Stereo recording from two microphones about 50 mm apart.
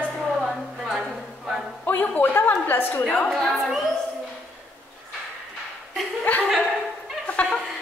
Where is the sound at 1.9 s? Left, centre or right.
Left.